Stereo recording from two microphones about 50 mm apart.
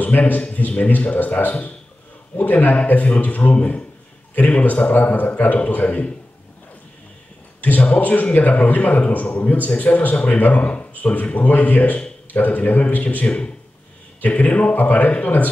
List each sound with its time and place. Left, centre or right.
0.0 s a man's voice: left
7.6 s a man's voice: left
13.2 s a man's voice: left